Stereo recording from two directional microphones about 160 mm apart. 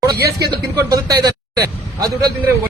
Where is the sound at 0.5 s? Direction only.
25° right (ahead or behind).